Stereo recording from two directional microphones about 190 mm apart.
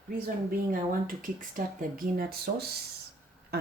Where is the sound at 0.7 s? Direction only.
45° right (ahead or behind).